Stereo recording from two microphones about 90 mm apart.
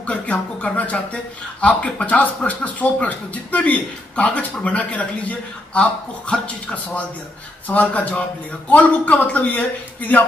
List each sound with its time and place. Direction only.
0.0 s a man's voice: 15° left (ahead or behind)